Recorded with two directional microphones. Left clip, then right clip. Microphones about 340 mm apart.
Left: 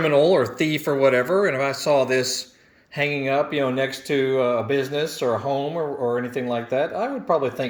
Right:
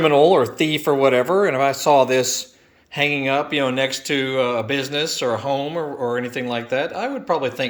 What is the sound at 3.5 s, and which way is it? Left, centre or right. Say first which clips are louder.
Speech: right 3 dB; right.